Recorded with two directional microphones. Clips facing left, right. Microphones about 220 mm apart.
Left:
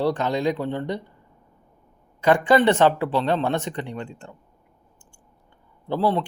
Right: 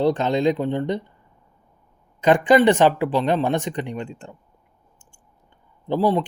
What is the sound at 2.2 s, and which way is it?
Speech, 20° right (ahead or behind).